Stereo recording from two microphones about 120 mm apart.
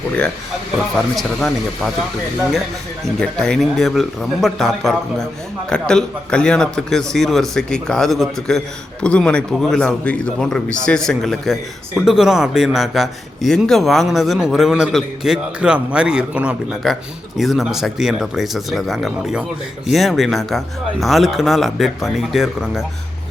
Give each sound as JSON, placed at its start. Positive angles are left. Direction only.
{"t": 0.9, "sound": "speech", "side_deg": 0}
{"t": 3.0, "sound": "speech", "side_deg": 5}
{"t": 16.8, "sound": "speech", "side_deg": 0}